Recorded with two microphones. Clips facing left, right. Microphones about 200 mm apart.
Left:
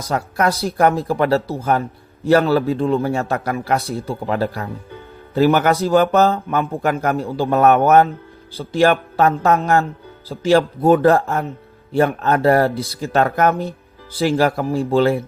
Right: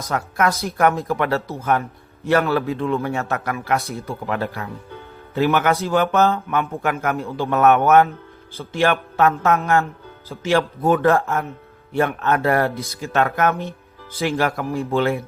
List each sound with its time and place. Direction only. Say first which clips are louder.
0.1 s speech: left 2 dB; 35° left (ahead or behind)